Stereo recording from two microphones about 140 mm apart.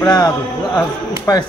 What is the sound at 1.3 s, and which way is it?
Speech, 20° left (ahead or behind).